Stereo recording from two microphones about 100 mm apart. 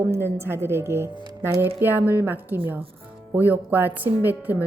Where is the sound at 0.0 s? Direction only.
20° right (ahead or behind).